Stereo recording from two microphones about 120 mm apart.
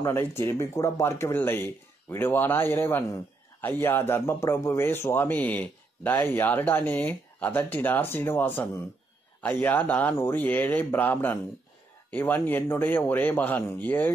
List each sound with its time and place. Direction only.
0.0 s a man's voice: 20° left (ahead or behind)